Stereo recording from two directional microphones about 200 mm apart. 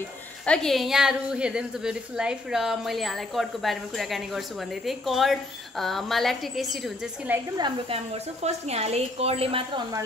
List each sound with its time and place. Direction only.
0.5 s a woman's voice: centre (ahead or behind)
7.3 s a woman's voice: 20° right (ahead or behind)